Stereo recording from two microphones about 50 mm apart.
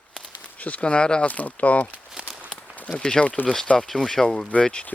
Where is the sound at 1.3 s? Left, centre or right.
Left.